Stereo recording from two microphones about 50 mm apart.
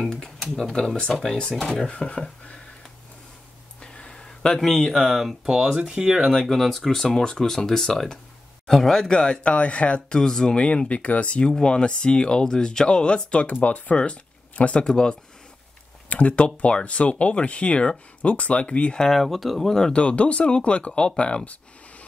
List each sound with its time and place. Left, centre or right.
0.0 s speech: centre
3.8 s a sound: centre
4.6 s speech: centre
5.5 s speech: centre
6.3 s speech: centre
16.1 s speech: left
19.0 s speech: centre; by 21.4 s left